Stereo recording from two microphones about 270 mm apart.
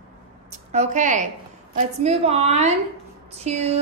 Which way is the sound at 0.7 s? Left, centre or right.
Right.